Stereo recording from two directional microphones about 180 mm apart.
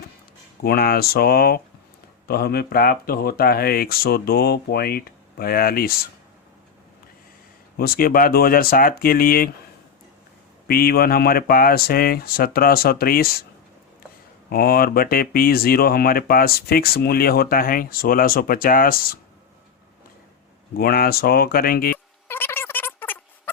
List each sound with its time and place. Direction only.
0.6 s speech: 60° left (ahead or behind)
7.8 s speech: 55° left (ahead or behind)
10.7 s speech: 55° left (ahead or behind)
14.5 s speech: 55° left (ahead or behind)
20.7 s speech: 55° left (ahead or behind)
21.9 s a sound: 10° left (ahead or behind)